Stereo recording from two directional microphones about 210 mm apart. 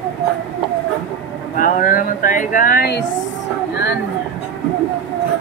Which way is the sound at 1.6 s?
40° left (ahead or behind).